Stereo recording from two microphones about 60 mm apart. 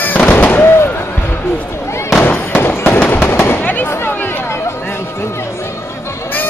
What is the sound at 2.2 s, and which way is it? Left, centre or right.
Fireworks, left.